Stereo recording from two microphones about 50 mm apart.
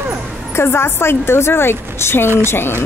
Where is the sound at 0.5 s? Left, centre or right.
Left.